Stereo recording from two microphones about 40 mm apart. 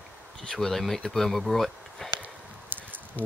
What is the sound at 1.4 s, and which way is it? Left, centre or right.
Insect, centre.